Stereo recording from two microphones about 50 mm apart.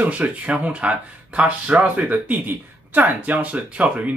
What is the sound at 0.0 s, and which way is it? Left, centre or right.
Speech, right.